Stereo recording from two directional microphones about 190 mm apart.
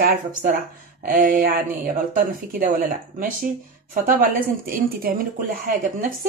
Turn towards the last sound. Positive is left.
turn(degrees=-45)  # may be behind; listen again after turning